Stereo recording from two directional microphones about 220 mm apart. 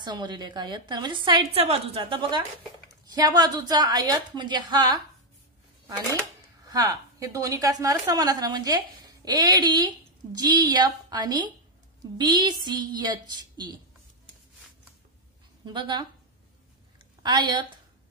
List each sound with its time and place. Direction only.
0.0 s a woman's voice: 20° right (ahead or behind)
6.7 s a woman's voice: 15° right (ahead or behind)
15.6 s a woman's voice: 20° right (ahead or behind)
17.2 s a woman's voice: 20° right (ahead or behind)